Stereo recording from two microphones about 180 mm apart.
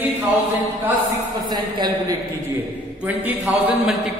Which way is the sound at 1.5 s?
25° right (ahead or behind).